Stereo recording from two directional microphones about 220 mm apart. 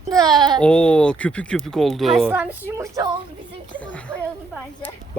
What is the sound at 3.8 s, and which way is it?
Speech, 5° left (ahead or behind).